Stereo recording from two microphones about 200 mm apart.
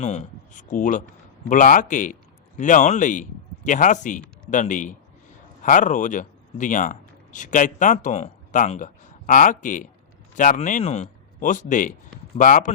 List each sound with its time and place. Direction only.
0.0 s speech: 35° left (ahead or behind)